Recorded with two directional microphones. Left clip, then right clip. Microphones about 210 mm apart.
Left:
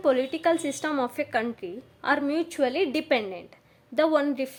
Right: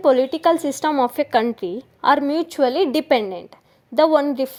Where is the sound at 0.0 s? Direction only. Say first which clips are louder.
Right 8 dB; 30° right (ahead or behind).